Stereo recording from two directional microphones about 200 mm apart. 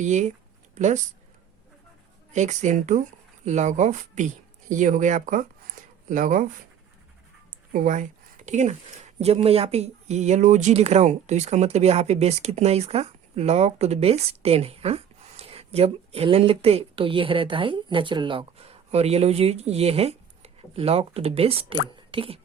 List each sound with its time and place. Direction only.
0.0 s speech: 35° right (ahead or behind)
2.3 s speech: 35° right (ahead or behind)
7.7 s speech: 40° right (ahead or behind)
21.9 s a sound: 25° right (ahead or behind)